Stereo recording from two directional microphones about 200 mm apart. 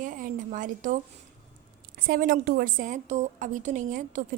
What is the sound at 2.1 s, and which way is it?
A woman's voice, 45° right (ahead or behind).